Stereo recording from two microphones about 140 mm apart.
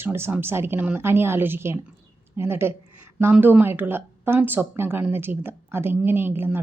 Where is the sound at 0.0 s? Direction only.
15° right (ahead or behind).